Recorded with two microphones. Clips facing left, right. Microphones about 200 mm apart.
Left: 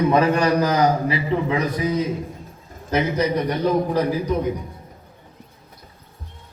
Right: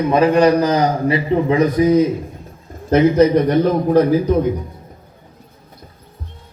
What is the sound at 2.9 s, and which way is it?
Speech, 55° right (ahead or behind).